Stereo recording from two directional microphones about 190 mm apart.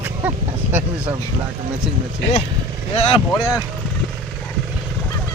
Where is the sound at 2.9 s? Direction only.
30° left (ahead or behind).